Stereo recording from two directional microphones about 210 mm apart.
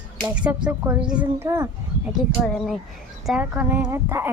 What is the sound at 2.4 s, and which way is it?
A woman's voice, centre (ahead or behind).